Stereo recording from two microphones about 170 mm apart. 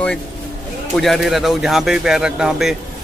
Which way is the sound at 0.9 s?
Centre (ahead or behind).